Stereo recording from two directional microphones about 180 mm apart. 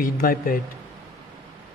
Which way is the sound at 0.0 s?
55° left (ahead or behind).